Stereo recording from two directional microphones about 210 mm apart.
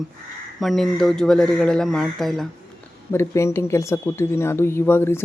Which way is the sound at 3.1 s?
10° left (ahead or behind).